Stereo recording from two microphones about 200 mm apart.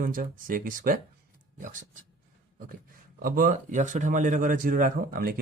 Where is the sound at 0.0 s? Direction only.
45° right (ahead or behind).